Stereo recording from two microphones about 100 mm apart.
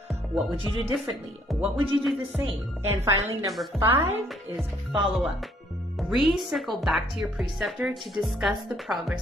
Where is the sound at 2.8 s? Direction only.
30° right (ahead or behind).